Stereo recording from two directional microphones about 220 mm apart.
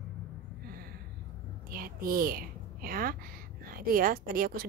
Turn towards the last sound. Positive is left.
turn(degrees=-40)  # may be behind; listen again after turning